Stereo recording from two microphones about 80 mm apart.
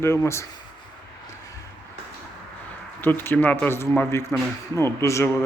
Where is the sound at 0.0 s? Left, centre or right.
Left.